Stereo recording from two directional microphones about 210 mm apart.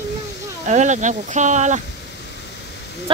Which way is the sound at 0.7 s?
35° right (ahead or behind).